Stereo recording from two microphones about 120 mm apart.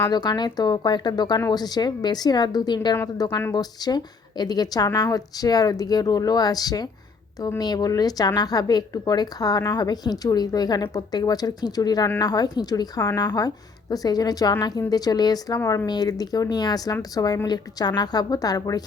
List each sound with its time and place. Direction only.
0.0 s speech: 35° left (ahead or behind)